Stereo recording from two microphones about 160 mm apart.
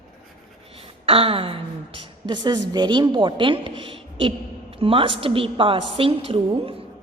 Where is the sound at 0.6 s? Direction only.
35° right (ahead or behind).